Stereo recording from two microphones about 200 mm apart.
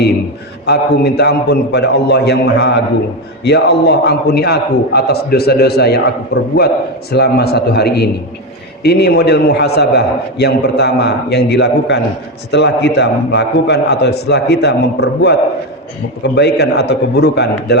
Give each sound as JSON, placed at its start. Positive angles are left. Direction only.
{"t": 0.6, "sound": "a man's voice", "side_deg": 55}